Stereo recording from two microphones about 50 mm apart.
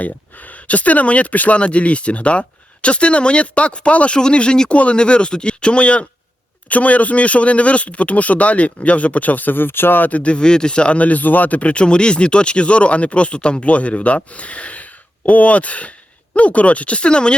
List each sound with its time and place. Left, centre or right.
0.0 s speech: left
10.1 s speech: left